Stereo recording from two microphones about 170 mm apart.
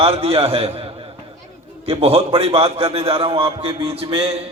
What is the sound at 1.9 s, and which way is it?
A man's voice, 35° right (ahead or behind).